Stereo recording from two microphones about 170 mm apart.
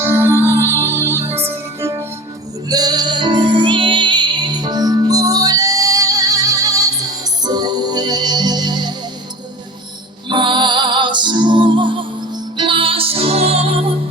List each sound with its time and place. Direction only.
0.0 s music: 15° right (ahead or behind)
10.2 s music: 30° right (ahead or behind)